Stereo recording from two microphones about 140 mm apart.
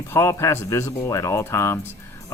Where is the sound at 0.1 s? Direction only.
20° left (ahead or behind).